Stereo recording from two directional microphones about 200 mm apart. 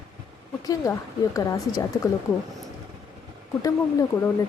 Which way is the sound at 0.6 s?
15° left (ahead or behind).